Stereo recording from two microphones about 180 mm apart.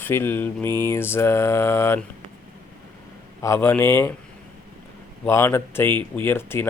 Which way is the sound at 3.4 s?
15° left (ahead or behind).